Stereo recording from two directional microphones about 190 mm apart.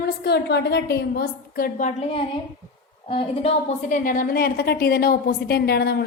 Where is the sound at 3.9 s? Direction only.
45° left (ahead or behind).